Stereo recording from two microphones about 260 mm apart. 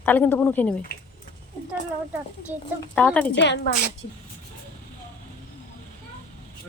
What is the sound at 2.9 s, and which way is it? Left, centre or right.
Speech, centre.